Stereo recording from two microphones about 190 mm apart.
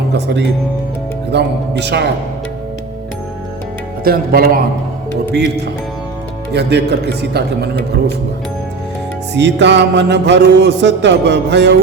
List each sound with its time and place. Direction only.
0.1 s music: 65° right (ahead or behind)
4.0 s speech: 50° right (ahead or behind)
5.3 s music: 60° right (ahead or behind)
9.3 s music: 65° right (ahead or behind)